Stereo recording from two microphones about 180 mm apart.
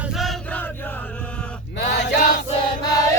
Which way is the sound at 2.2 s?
55° left (ahead or behind).